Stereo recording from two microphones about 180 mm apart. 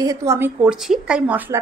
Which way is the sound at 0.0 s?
15° right (ahead or behind).